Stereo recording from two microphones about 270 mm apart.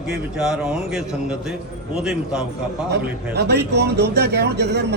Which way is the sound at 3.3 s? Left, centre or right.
Right.